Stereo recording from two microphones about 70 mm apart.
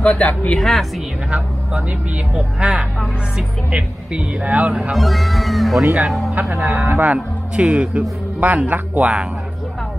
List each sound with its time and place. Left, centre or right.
0.0 s speech: left
0.6 s speech: centre
1.3 s speech: centre
4.9 s speech: centre
6.6 s speech: right